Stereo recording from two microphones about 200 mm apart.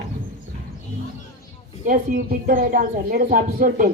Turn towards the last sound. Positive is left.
turn(degrees=-45)  # may be behind; listen again after turning